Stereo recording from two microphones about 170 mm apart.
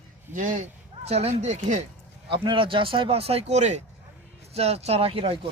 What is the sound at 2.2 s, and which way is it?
Speech, 30° right (ahead or behind).